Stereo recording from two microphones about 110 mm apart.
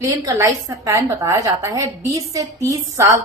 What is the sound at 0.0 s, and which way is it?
A woman's voice, 25° right (ahead or behind).